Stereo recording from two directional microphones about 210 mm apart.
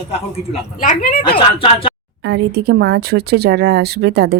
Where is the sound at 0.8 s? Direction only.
40° left (ahead or behind).